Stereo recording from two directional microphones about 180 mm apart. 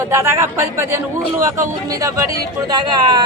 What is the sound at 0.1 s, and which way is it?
A man's voice, 15° right (ahead or behind).